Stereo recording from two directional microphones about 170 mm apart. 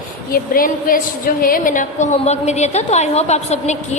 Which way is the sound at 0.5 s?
55° left (ahead or behind).